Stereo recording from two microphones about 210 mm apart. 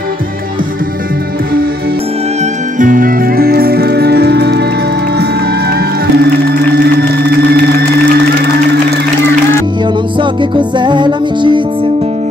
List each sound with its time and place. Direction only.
2.8 s music: 40° right (ahead or behind)
5.7 s music: 50° right (ahead or behind)
10.1 s music: 20° right (ahead or behind)